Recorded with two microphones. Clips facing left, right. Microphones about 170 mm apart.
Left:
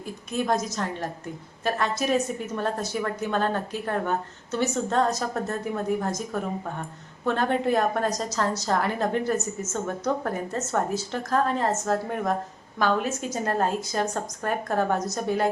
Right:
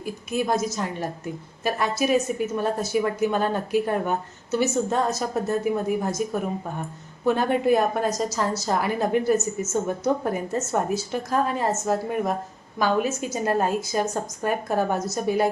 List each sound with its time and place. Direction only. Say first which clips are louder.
0.0 s speech: right 2 dB; 5° right (ahead or behind)